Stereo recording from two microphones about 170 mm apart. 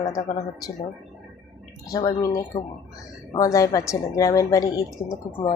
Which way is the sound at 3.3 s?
20° left (ahead or behind).